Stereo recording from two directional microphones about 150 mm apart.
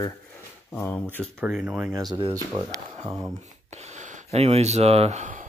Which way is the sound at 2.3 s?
20° right (ahead or behind).